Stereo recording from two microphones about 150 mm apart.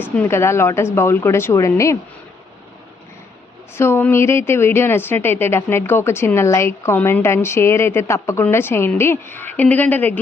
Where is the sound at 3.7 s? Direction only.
15° left (ahead or behind).